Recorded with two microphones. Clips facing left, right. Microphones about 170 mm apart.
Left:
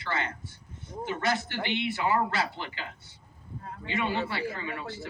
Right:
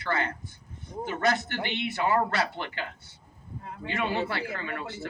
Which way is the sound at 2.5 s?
55° right (ahead or behind).